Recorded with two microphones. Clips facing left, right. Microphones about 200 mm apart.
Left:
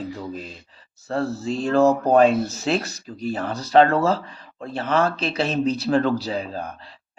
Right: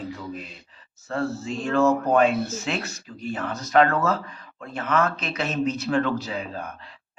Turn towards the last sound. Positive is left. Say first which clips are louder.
# left 4 dB
turn(degrees=35)  # may be behind; listen again after turning